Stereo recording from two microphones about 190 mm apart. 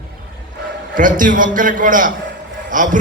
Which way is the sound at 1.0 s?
45° right (ahead or behind).